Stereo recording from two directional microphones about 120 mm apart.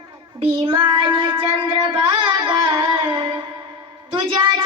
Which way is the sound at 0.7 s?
45° right (ahead or behind).